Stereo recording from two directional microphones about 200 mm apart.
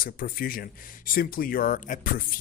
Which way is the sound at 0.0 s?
45° left (ahead or behind).